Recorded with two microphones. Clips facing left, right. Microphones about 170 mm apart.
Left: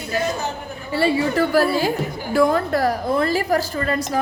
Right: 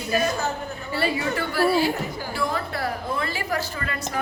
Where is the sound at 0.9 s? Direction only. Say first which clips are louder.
Left 7 dB; 25° left (ahead or behind).